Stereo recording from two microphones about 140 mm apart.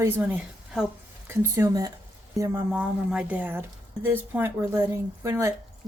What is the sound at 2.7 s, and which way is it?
Speech, 10° right (ahead or behind).